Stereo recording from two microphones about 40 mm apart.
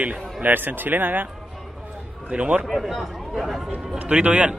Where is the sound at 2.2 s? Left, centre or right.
Right.